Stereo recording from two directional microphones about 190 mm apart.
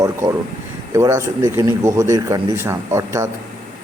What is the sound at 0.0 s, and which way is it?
Speech, 15° right (ahead or behind).